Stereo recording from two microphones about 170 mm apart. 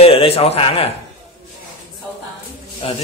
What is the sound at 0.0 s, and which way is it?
Speech, 35° left (ahead or behind).